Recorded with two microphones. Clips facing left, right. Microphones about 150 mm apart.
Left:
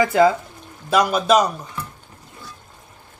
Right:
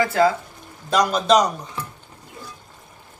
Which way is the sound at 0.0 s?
20° left (ahead or behind).